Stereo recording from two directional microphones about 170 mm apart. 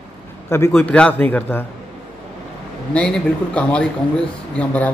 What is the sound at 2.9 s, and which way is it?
A man's voice, 5° left (ahead or behind).